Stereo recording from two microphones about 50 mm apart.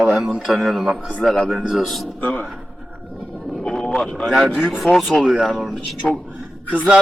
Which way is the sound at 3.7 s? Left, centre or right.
Centre.